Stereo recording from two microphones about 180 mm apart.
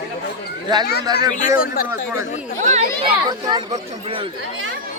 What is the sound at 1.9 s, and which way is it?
Speech, 10° right (ahead or behind).